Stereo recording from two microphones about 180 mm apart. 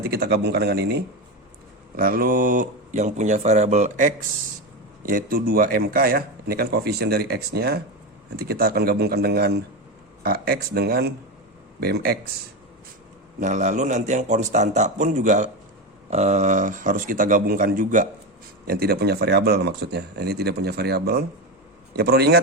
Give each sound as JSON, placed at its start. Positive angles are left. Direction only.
{"t": 0.0, "sound": "a man's voice", "side_deg": -60}
{"t": 2.0, "sound": "a man's voice", "side_deg": -55}
{"t": 13.4, "sound": "a man's voice", "side_deg": -40}
{"t": 18.7, "sound": "a man's voice", "side_deg": -60}